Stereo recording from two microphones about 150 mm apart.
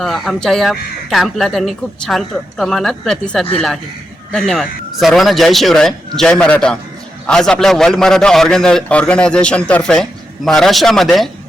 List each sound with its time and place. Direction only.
0.0 s a man's voice: centre (ahead or behind)